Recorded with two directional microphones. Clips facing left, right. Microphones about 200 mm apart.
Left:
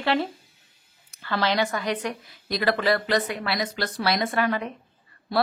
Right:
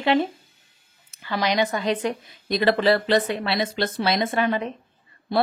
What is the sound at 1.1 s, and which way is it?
A woman's voice, 15° right (ahead or behind).